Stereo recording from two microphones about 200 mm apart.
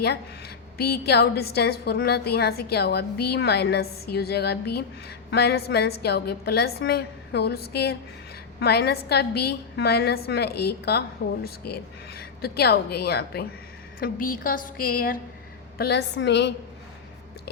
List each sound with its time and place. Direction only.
0.8 s a woman's voice: 55° left (ahead or behind)
15.8 s a woman's voice: 55° left (ahead or behind)